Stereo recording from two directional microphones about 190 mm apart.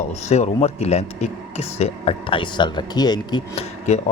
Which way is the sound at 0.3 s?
35° left (ahead or behind).